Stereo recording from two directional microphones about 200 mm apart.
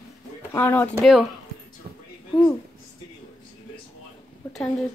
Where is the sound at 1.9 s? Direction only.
45° right (ahead or behind).